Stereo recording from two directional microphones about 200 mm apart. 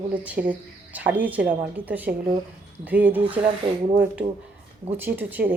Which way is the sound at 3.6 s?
25° right (ahead or behind).